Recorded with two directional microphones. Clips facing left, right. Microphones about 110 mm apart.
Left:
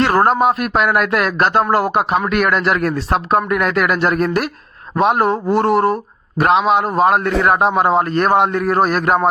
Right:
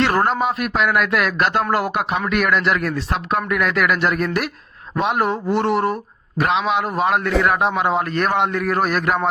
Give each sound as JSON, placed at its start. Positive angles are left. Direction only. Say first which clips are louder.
{"t": 0.0, "sound": "a man's voice", "louder": "left 5 dB", "side_deg": 40}